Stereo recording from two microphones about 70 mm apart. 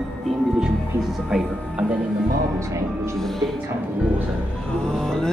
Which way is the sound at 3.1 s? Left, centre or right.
Centre.